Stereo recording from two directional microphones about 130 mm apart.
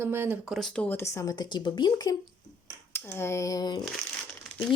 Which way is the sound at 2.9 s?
20° left (ahead or behind).